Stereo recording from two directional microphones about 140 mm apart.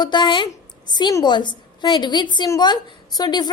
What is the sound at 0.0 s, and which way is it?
A woman's voice, 30° left (ahead or behind).